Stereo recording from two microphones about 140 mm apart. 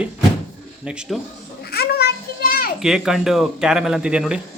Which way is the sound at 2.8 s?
5° right (ahead or behind).